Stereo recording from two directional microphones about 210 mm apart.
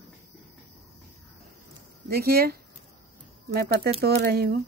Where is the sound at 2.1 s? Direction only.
45° right (ahead or behind).